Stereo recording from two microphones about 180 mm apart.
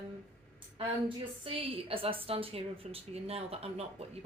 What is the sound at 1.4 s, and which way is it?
Speech, 30° right (ahead or behind).